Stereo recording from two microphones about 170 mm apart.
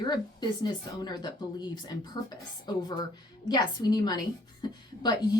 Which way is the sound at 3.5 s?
25° left (ahead or behind).